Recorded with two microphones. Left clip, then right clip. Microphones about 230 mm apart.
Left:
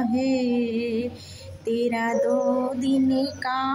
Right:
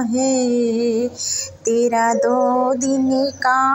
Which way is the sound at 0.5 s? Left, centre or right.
Centre.